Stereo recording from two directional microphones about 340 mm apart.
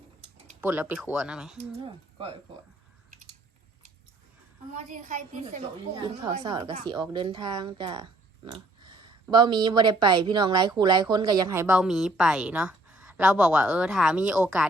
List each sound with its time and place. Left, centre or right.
0.6 s speech: centre
1.8 s speech: centre
4.9 s a woman's voice: right; by 14.7 s centre